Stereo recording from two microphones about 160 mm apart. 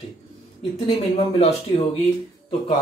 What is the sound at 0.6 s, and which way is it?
Speech, 35° left (ahead or behind).